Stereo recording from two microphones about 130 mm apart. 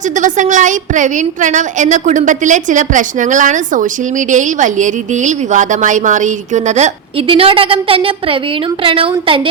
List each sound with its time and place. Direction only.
0.2 s a woman's voice: 75° right (ahead or behind)
7.3 s a woman's voice: 45° right (ahead or behind)